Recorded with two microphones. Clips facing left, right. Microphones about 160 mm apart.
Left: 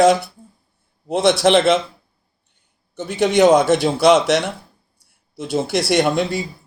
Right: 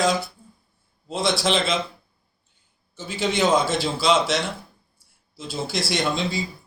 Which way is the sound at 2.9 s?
65° left (ahead or behind).